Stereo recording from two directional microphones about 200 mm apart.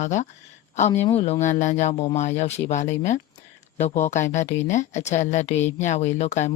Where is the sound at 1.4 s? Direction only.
40° left (ahead or behind).